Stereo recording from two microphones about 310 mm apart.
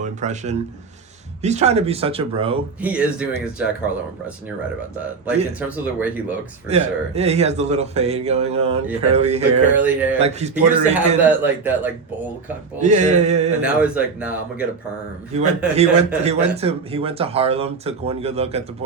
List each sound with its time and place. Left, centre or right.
0.0 s speech: right
2.8 s speech: centre
5.2 s speech: centre
6.7 s speech: right
11.2 s speech: centre
12.8 s speech: right
13.6 s speech: centre
15.3 s speech: right